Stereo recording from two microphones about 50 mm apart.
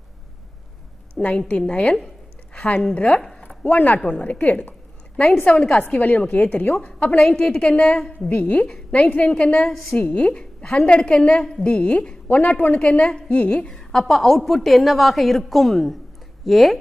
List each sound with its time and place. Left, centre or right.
1.2 s a sound: centre
1.5 s a woman's voice: centre
2.5 s a sound: left
2.9 s a woman's voice: left
3.3 s a sound: left
4.0 s a woman's voice: left
5.9 s a woman's voice: left
12.4 s a woman's voice: left
13.7 s a woman's voice: centre